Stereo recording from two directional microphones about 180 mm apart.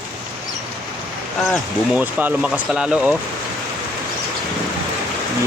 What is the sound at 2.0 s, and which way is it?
Speech, 5° right (ahead or behind).